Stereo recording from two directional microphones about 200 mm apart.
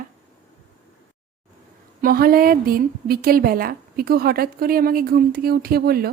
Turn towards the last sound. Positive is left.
turn(degrees=-50)  # may be behind; listen again after turning